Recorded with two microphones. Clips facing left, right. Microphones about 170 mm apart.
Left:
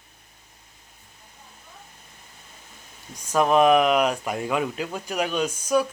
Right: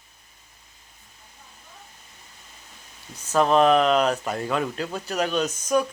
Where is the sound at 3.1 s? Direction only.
10° left (ahead or behind).